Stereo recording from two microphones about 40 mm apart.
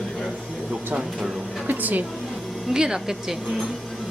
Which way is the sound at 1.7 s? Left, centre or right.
Right.